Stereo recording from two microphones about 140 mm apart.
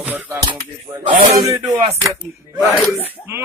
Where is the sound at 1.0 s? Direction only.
65° right (ahead or behind).